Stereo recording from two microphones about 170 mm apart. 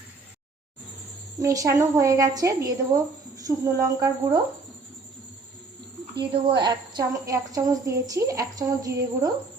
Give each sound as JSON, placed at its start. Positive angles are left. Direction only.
{"t": 1.4, "sound": "a woman's voice", "side_deg": -20}
{"t": 6.1, "sound": "a woman's voice", "side_deg": -25}